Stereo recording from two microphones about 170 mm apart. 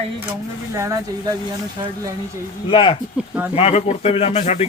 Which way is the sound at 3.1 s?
10° right (ahead or behind).